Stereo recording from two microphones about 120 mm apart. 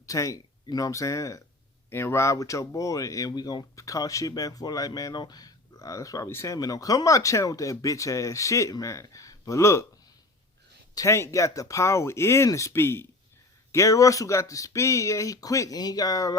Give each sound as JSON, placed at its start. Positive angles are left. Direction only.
{"t": 0.0, "sound": "speech", "side_deg": 25}
{"t": 10.9, "sound": "speech", "side_deg": 25}